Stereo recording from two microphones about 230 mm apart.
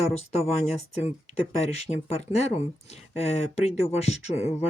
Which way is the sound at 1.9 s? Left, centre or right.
Left.